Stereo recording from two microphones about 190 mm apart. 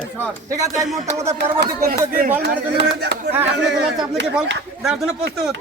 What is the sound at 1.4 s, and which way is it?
Speech, 50° right (ahead or behind).